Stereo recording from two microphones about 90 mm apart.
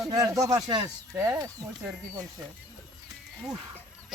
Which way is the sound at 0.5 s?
55° right (ahead or behind).